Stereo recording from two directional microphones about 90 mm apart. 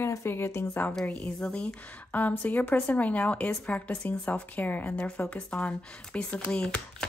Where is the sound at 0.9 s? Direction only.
10° left (ahead or behind).